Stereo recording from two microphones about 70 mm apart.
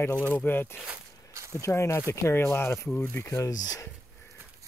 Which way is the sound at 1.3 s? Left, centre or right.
Right.